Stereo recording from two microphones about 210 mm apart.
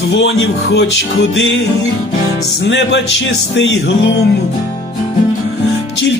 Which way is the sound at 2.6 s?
60° left (ahead or behind).